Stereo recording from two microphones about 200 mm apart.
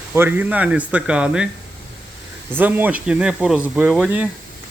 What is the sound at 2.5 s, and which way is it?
Speech, 10° right (ahead or behind).